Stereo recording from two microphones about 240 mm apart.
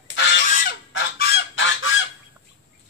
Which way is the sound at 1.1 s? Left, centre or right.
Left.